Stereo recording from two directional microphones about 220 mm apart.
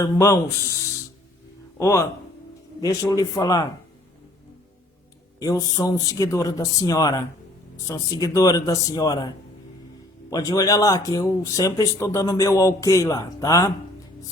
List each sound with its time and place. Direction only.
0.0 s speech: 15° left (ahead or behind)
1.8 s speech: 15° left (ahead or behind)
5.4 s speech: 15° left (ahead or behind)